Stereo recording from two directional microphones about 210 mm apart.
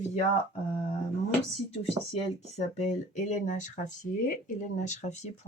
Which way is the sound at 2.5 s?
35° left (ahead or behind).